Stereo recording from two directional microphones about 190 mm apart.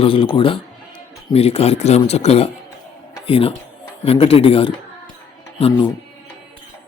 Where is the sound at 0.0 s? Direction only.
30° left (ahead or behind).